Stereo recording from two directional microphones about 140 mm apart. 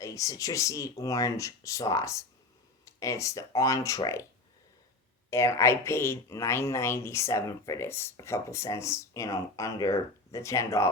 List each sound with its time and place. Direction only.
0.0 s speech: 25° left (ahead or behind)
5.3 s speech: 20° left (ahead or behind)